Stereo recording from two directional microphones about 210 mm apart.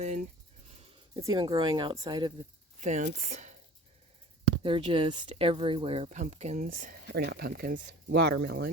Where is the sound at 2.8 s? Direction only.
35° right (ahead or behind).